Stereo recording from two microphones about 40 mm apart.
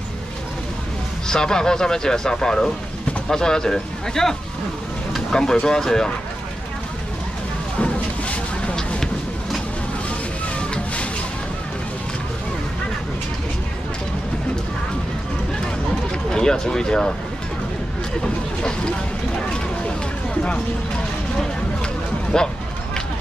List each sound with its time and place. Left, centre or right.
1.2 s speech: centre
7.8 s a sound: left
10.6 s music: left
16.3 s speech: centre
18.6 s speech: centre
22.3 s speech: centre